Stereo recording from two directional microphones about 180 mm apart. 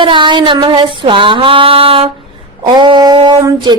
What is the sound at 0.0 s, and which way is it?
A woman's voice, 25° right (ahead or behind).